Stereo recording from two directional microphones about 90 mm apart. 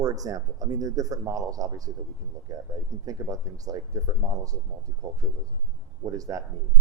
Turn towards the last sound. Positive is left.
turn(degrees=-40)  # may be behind; listen again after turning